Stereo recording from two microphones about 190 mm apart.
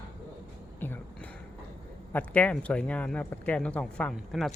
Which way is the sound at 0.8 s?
10° left (ahead or behind).